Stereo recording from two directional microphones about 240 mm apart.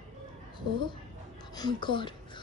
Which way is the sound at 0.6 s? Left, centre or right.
Centre.